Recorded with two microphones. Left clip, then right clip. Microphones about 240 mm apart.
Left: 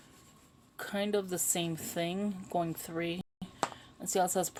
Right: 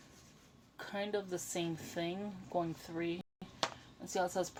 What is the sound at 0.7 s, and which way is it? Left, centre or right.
A woman's voice, left.